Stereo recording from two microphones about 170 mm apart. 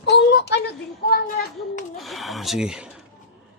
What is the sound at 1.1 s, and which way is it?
Speech, 55° left (ahead or behind).